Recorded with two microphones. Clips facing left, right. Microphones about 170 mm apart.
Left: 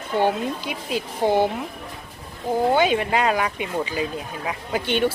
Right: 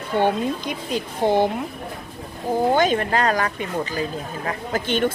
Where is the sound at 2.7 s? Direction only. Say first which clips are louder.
Even; 10° left (ahead or behind).